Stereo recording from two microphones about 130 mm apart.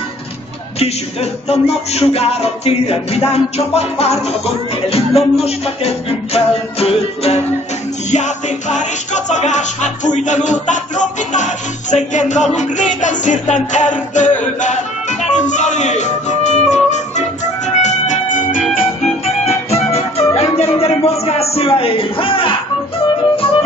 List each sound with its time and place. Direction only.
0.7 s music: 55° left (ahead or behind)
8.1 s music: 65° left (ahead or behind); by 18.9 s 85° left
19.2 s music: 55° left (ahead or behind)